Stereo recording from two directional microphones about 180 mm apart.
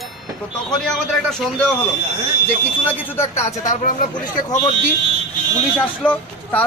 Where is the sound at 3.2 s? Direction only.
45° left (ahead or behind).